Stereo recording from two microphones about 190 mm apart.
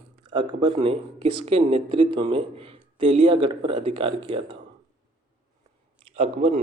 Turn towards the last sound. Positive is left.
turn(degrees=-35)  # may be behind; listen again after turning